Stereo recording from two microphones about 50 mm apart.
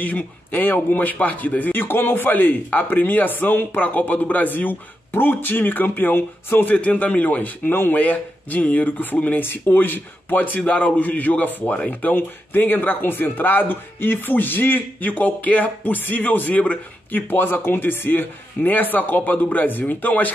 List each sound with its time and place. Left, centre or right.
0.0 s speech: left
7.7 s speech: left
8.0 s speech: left
17.3 s speech: left